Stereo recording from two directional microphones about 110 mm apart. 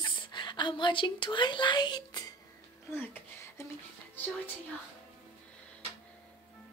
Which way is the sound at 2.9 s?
20° left (ahead or behind).